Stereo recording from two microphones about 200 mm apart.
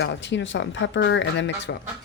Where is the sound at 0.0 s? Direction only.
60° left (ahead or behind).